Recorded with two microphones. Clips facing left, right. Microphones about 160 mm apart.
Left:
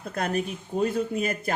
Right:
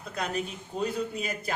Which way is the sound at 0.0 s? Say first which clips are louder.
Left 4 dB; 50° left (ahead or behind).